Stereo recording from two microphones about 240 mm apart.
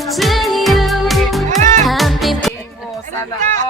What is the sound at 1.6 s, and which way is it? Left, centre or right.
Music, right.